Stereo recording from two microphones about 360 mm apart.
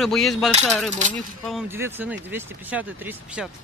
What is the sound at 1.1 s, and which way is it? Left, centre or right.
Speech, centre.